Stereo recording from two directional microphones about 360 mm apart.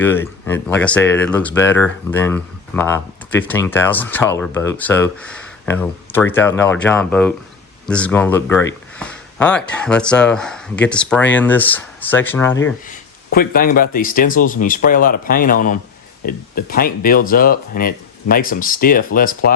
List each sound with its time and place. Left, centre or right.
0.0 s speech: centre
13.3 s speech: left